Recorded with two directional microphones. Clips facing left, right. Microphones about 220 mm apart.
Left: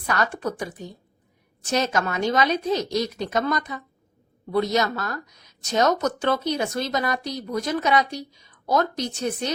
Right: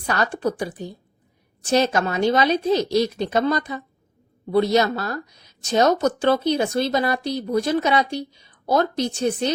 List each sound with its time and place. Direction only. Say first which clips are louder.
0.0 s speech: right 3 dB; 30° right (ahead or behind)